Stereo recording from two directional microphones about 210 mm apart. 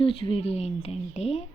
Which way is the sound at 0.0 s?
25° left (ahead or behind).